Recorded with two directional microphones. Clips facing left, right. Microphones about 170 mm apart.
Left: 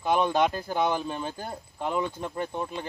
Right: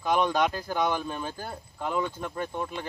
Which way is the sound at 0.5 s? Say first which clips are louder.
Left 1 dB; 20° left (ahead or behind).